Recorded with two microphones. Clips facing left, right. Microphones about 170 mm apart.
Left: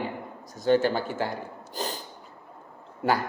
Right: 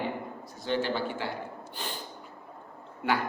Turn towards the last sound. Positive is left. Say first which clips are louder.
# left 4 dB
turn(degrees=40)  # may be behind; listen again after turning